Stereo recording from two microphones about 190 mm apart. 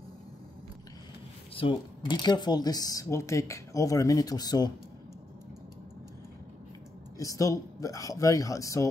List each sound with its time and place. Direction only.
1.5 s speech: 25° left (ahead or behind)
7.2 s speech: 15° left (ahead or behind)